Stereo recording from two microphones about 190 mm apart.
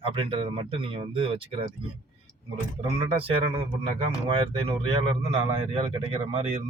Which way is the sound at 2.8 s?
30° right (ahead or behind).